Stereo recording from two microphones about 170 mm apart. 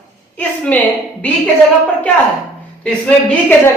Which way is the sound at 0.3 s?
10° left (ahead or behind).